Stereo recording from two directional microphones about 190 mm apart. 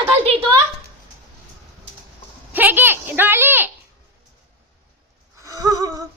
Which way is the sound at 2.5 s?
10° right (ahead or behind).